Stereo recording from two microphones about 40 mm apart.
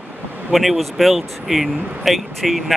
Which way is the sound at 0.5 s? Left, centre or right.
Centre.